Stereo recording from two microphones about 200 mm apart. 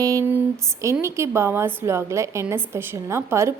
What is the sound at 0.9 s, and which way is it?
A woman's voice, 15° right (ahead or behind).